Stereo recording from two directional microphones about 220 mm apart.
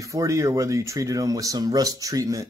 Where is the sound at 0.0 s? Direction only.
15° right (ahead or behind).